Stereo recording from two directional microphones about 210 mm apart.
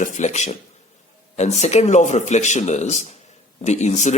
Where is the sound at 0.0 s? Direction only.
35° left (ahead or behind).